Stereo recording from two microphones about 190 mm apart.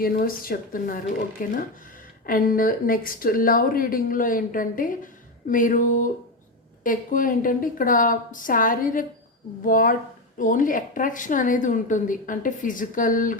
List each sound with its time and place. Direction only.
0.0 s speech: 50° left (ahead or behind)